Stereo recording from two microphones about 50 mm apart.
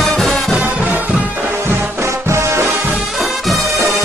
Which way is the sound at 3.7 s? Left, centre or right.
Left.